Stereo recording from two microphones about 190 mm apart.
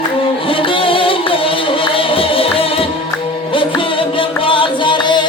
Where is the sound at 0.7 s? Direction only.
25° left (ahead or behind).